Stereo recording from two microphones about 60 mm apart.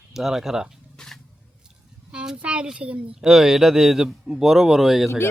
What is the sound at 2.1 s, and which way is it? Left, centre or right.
A woman's voice, centre.